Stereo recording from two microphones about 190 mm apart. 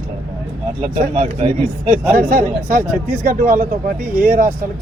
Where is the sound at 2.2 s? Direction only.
50° right (ahead or behind).